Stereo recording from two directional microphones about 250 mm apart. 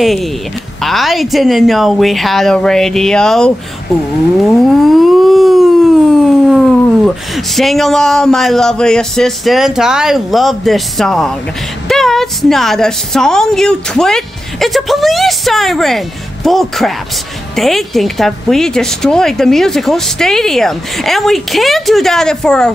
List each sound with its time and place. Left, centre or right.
0.0 s a woman's voice: centre
4.5 s a sound: centre
7.3 s a woman's voice: centre